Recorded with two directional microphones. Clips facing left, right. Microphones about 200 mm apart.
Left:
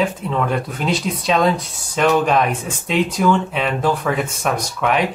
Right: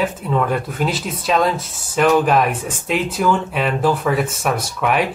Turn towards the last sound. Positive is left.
turn(degrees=-5)  # may be behind; listen again after turning